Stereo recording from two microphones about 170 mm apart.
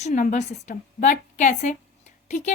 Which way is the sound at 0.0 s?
45° left (ahead or behind).